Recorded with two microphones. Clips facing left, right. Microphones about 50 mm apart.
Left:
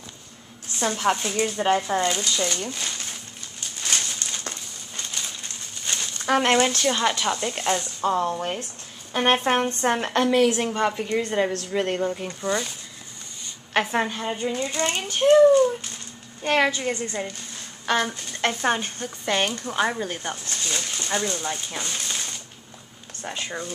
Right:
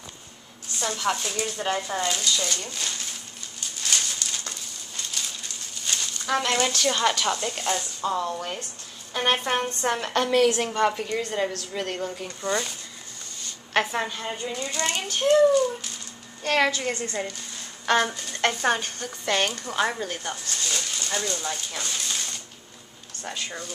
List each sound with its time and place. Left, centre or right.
0.7 s speech: left
3.8 s a sound: left
6.9 s a woman's voice: centre
7.5 s speech: left
10.2 s a woman's voice: centre
12.4 s speech: centre
13.4 s a sound: centre
14.4 s speech: left
16.4 s a woman's voice: centre
17.8 s speech: centre
18.7 s a woman's voice: centre
20.2 s speech: left
20.6 s a sound: centre
21.4 s speech: left